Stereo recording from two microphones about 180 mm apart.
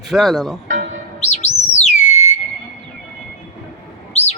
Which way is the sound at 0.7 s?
50° right (ahead or behind).